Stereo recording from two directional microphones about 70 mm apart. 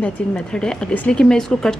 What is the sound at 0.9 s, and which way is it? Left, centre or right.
Speech, left.